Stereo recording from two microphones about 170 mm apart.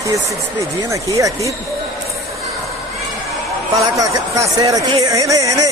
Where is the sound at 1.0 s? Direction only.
20° right (ahead or behind).